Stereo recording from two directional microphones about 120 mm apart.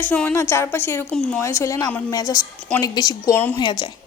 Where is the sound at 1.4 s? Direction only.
25° left (ahead or behind); by 3.8 s 40° left (ahead or behind).